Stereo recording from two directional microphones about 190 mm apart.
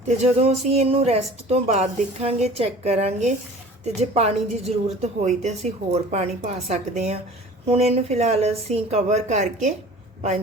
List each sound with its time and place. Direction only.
0.2 s a man's voice: 35° right (ahead or behind)